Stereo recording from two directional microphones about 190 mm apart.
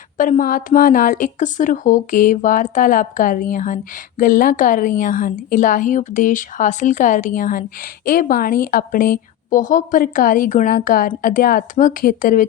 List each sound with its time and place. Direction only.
0.2 s speech: 45° left (ahead or behind)